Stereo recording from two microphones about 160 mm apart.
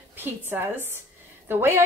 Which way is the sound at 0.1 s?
15° right (ahead or behind).